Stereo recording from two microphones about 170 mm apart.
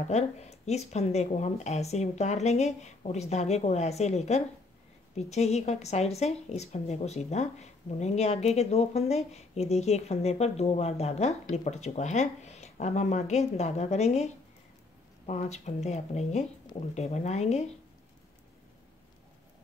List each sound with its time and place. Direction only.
0.1 s a woman's voice: 40° left (ahead or behind)